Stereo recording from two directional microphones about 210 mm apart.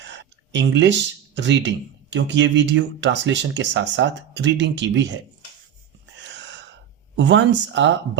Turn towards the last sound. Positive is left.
turn(degrees=-60)  # may be behind; listen again after turning